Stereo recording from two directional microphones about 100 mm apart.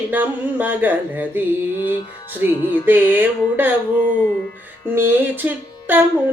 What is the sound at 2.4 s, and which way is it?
Music, 25° right (ahead or behind).